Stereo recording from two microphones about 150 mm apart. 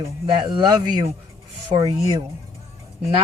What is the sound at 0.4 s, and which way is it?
Speech, 30° right (ahead or behind).